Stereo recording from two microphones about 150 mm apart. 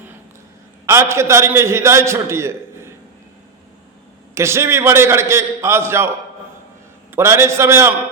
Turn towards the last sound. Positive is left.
turn(degrees=-15)  # may be behind; listen again after turning